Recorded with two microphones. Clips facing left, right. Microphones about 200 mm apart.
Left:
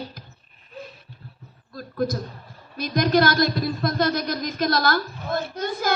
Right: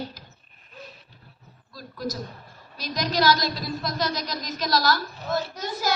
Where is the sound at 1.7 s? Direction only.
55° left (ahead or behind).